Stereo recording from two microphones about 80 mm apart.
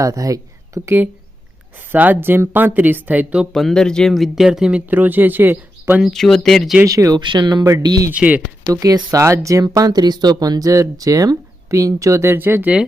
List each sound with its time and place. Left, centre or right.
0.0 s speech: right
0.9 s speech: right
3.5 s speech: centre
4.9 s speech: right
6.1 s speech: centre
6.8 s speech: right
7.2 s speech: right
8.1 s speech: centre
8.6 s speech: right
12.3 s speech: right